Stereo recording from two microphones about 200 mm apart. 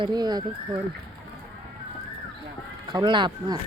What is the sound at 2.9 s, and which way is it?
Speech, 25° right (ahead or behind).